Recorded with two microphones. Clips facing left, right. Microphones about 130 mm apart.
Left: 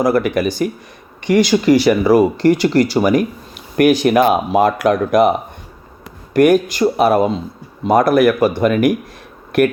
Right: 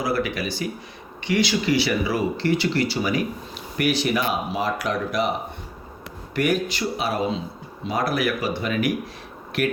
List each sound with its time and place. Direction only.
0.0 s speech: 50° left (ahead or behind)
6.3 s speech: 45° left (ahead or behind)